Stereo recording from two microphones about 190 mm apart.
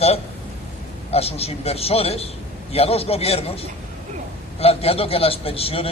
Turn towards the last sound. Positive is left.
turn(degrees=30)  # may be behind; listen again after turning